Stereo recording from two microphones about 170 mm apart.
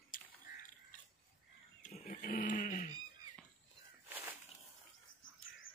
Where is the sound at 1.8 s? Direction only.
45° left (ahead or behind).